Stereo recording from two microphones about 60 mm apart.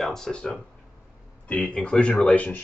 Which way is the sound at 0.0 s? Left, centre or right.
Centre.